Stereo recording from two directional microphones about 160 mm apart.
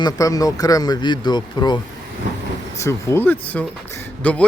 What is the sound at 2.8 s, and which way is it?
Speech, 15° left (ahead or behind).